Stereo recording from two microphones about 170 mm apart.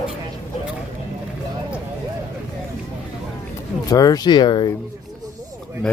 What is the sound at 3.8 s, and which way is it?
Speech, 20° left (ahead or behind).